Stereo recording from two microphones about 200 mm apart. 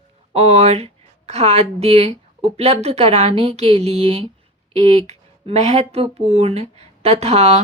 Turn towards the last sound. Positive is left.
turn(degrees=-30)  # may be behind; listen again after turning